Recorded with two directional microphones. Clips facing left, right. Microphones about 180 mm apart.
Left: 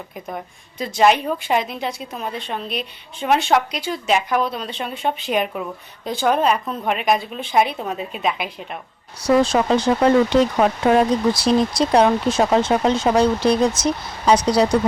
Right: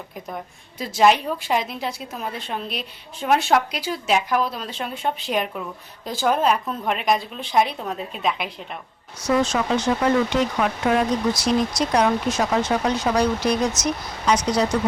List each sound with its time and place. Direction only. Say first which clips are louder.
0.8 s a woman's voice: left 1 dB; centre (ahead or behind)
9.2 s speech: left 5 dB; 35° left (ahead or behind)